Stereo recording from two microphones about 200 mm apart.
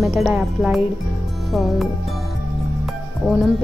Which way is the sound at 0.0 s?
Centre (ahead or behind).